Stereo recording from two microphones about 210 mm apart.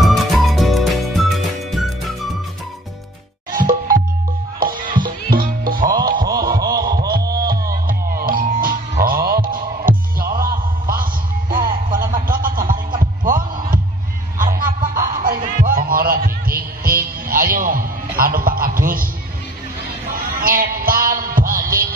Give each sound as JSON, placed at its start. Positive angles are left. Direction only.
{"t": 0.0, "sound": "music", "side_deg": 0}
{"t": 3.5, "sound": "music", "side_deg": -40}
{"t": 5.0, "sound": "music", "side_deg": -45}
{"t": 6.3, "sound": "a sound", "side_deg": -45}
{"t": 7.7, "sound": "music", "side_deg": -45}
{"t": 11.5, "sound": "a sound", "side_deg": -40}
{"t": 13.0, "sound": "heart sounds", "side_deg": -40}
{"t": 14.4, "sound": "music", "side_deg": -40}
{"t": 20.1, "sound": "heart sounds", "side_deg": -40}